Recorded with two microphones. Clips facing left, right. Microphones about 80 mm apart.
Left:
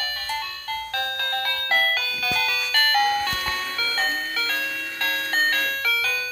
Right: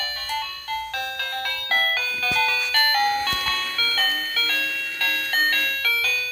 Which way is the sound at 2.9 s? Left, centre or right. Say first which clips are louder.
Left 1 dB; left.